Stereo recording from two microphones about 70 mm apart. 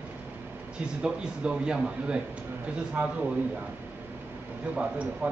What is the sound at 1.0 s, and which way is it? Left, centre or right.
A man's voice, centre.